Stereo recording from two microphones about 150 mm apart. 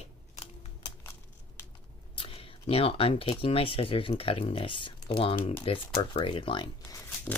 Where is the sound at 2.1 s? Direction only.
35° left (ahead or behind).